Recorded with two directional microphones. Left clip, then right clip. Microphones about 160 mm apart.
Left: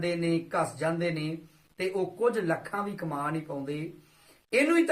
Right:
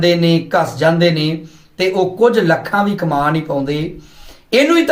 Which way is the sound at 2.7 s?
20° left (ahead or behind).